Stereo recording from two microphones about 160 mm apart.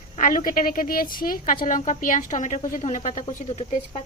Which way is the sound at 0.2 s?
55° left (ahead or behind).